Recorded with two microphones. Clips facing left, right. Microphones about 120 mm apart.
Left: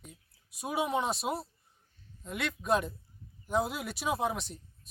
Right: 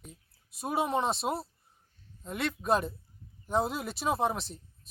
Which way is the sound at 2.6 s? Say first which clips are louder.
Even; centre (ahead or behind).